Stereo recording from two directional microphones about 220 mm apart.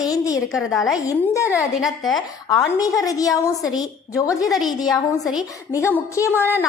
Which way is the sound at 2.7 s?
15° left (ahead or behind).